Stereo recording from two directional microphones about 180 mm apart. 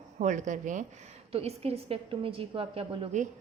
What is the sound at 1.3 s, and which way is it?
A woman's voice, 35° right (ahead or behind).